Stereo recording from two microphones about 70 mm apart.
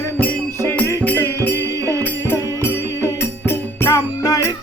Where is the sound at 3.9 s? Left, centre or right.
Left.